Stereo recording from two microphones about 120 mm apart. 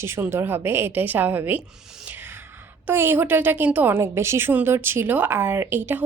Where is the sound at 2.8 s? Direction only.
20° right (ahead or behind).